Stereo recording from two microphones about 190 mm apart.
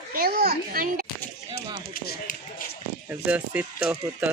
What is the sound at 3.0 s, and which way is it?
Speech, 5° right (ahead or behind).